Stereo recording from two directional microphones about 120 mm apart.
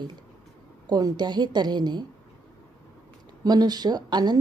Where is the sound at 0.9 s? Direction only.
35° right (ahead or behind).